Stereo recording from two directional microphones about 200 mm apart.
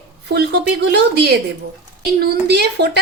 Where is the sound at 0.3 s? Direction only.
55° right (ahead or behind).